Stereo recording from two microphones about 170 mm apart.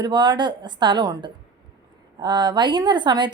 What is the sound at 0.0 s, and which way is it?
A woman's voice, 25° right (ahead or behind).